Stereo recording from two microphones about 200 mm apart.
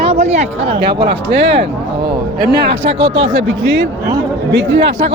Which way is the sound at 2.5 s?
65° right (ahead or behind).